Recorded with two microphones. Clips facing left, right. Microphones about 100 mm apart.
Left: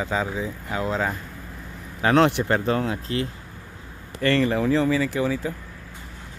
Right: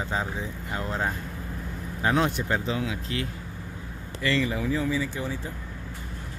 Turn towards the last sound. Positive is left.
turn(degrees=90)